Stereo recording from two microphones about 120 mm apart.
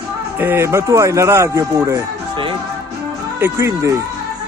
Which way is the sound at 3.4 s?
25° right (ahead or behind).